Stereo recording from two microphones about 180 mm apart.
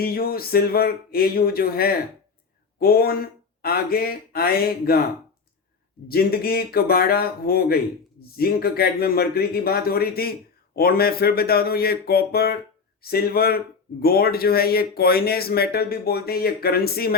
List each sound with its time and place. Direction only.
0.0 s speech: 55° left (ahead or behind)
6.1 s speech: 60° left (ahead or behind)